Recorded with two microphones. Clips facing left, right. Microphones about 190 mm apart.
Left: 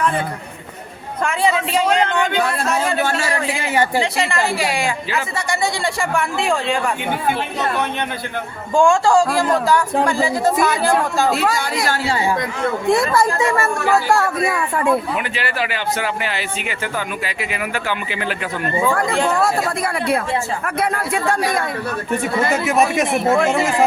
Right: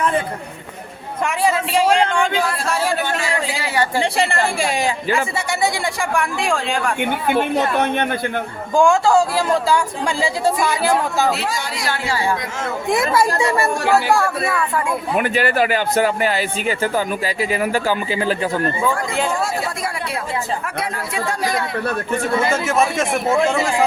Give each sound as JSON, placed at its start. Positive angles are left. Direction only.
{"t": 5.5, "sound": "speech", "side_deg": 0}
{"t": 7.3, "sound": "speech", "side_deg": -55}
{"t": 8.7, "sound": "speech", "side_deg": 0}
{"t": 11.3, "sound": "speech", "side_deg": 55}
{"t": 12.9, "sound": "speech", "side_deg": 0}
{"t": 15.1, "sound": "a man's voice", "side_deg": -45}
{"t": 18.9, "sound": "speech", "side_deg": 60}
{"t": 20.7, "sound": "speech", "side_deg": 55}
{"t": 22.5, "sound": "speech", "side_deg": 15}